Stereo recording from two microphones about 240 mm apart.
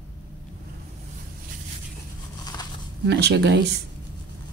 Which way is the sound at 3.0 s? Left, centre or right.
Right.